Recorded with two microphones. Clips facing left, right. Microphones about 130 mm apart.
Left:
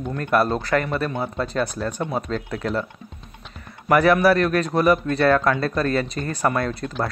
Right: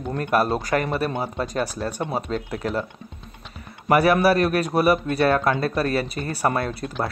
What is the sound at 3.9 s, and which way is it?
A man's voice, 15° right (ahead or behind).